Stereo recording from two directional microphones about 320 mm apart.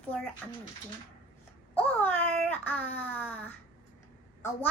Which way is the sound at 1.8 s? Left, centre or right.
Centre.